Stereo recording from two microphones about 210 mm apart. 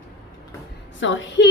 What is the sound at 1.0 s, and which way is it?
Speech, 65° left (ahead or behind).